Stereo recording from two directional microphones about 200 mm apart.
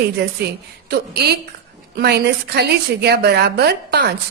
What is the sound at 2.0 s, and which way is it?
Speech, 55° right (ahead or behind).